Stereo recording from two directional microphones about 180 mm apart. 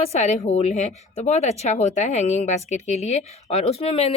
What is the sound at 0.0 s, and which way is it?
A woman's voice, 35° left (ahead or behind).